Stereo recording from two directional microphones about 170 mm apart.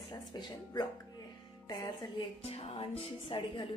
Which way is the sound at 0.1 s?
25° left (ahead or behind).